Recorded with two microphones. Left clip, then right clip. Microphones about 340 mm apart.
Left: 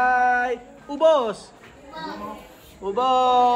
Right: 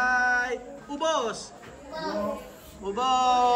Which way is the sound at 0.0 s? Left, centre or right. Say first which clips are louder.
Left 5 dB; centre.